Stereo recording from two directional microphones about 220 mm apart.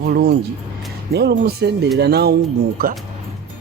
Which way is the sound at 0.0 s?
45° right (ahead or behind).